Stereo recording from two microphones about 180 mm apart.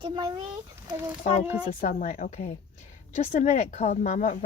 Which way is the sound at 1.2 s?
45° left (ahead or behind).